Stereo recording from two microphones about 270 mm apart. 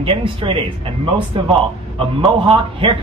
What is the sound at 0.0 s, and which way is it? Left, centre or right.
Speech, centre.